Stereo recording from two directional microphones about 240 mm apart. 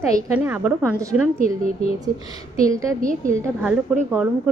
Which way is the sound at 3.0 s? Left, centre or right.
Right.